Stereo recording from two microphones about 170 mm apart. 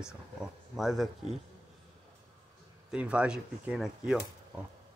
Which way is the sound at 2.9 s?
5° right (ahead or behind).